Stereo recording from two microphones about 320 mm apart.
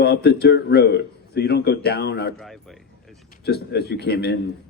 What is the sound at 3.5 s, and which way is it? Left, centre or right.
Speech, left.